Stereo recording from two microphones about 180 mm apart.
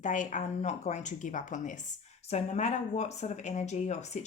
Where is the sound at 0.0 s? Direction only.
45° left (ahead or behind).